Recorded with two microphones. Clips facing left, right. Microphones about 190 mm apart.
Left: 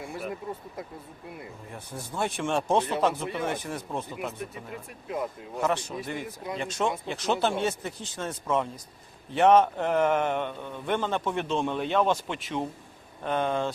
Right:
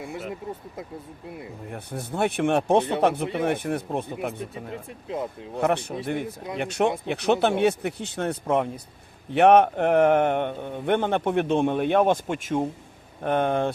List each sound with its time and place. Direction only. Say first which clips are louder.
0.0 s speech: right 2 dB; 20° right (ahead or behind)
1.7 s a man's voice: right 5 dB; 60° right (ahead or behind)
4.4 s speech: right 3 dB; 25° right (ahead or behind)
5.5 s a man's voice: right 4 dB; 60° right (ahead or behind)
6.2 s speech: right 2 dB; 25° right (ahead or behind)
6.6 s a man's voice: right 6 dB; 65° right (ahead or behind)